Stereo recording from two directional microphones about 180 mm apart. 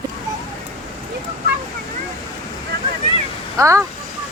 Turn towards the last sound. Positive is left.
turn(degrees=-15)  # may be behind; listen again after turning